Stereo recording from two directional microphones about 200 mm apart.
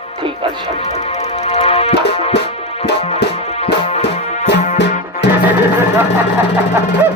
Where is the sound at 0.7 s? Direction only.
30° left (ahead or behind).